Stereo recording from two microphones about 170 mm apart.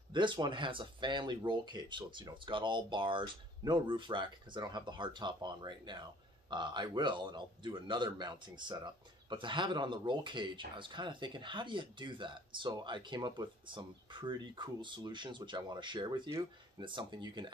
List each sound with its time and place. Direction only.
0.1 s a man's voice: 30° right (ahead or behind)